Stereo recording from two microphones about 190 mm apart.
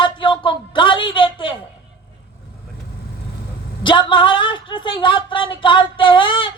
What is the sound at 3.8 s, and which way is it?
A woman's voice, 25° left (ahead or behind).